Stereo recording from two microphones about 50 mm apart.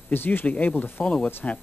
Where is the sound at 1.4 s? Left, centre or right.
Left.